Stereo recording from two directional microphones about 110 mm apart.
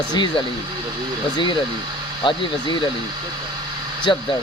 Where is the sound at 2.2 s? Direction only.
45° left (ahead or behind).